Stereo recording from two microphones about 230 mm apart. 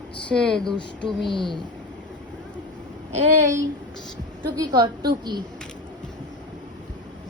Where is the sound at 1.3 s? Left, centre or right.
Left.